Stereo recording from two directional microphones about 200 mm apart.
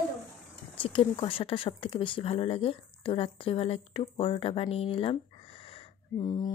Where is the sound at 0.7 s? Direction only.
25° left (ahead or behind).